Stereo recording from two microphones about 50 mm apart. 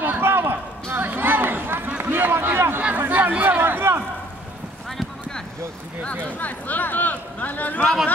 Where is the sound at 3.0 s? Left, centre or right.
Right.